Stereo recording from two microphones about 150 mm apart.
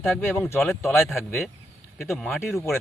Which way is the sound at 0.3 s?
15° left (ahead or behind).